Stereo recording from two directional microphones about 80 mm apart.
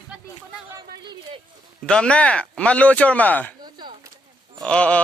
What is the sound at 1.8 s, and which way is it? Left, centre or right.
Speech, centre.